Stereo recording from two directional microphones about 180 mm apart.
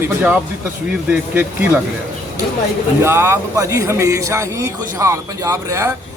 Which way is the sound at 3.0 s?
15° right (ahead or behind).